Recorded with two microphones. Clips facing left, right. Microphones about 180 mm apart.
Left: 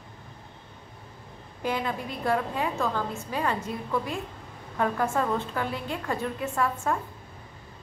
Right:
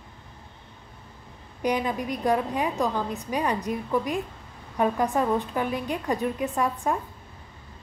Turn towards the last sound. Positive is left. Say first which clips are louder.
# right 1 dB
turn(degrees=-15)  # may be behind; listen again after turning